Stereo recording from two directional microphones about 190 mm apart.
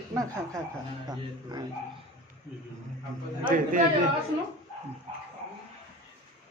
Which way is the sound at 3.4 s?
45° right (ahead or behind).